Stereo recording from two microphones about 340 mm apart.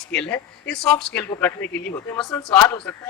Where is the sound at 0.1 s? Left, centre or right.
Centre.